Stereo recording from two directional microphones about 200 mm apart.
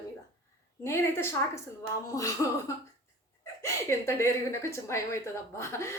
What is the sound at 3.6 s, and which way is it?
Speech, 15° left (ahead or behind).